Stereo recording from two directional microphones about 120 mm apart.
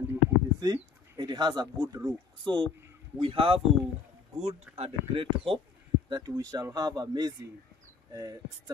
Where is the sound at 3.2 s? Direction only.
50° right (ahead or behind).